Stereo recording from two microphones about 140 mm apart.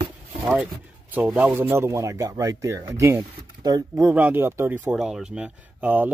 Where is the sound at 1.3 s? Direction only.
10° right (ahead or behind).